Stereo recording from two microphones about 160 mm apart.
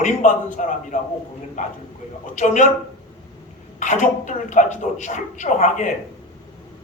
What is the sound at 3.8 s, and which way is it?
Speech, 50° left (ahead or behind).